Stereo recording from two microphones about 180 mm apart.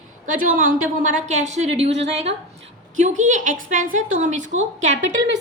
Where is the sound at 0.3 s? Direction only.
50° right (ahead or behind).